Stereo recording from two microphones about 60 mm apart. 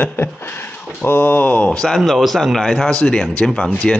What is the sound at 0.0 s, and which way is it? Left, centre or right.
Speech, left.